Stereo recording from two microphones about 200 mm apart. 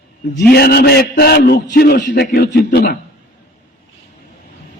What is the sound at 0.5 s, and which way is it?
A man's voice, 50° left (ahead or behind).